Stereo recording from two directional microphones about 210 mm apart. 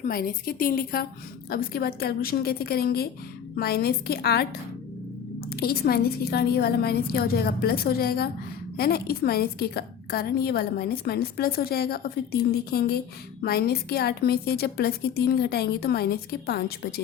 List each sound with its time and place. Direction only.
0.0 s a woman's voice: 45° left (ahead or behind)
5.5 s a woman's voice: 50° left (ahead or behind)